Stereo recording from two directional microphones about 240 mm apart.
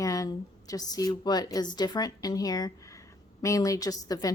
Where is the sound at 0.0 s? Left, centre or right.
Centre.